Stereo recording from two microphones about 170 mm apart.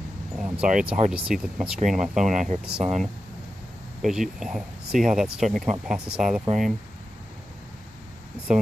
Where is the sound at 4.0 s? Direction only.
Centre (ahead or behind).